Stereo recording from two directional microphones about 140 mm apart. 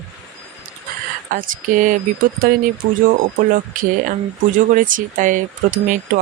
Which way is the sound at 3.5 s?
75° right (ahead or behind).